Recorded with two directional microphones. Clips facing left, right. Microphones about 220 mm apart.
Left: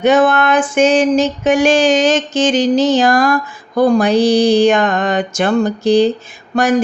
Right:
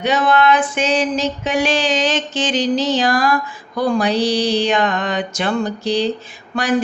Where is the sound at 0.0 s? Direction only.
50° left (ahead or behind).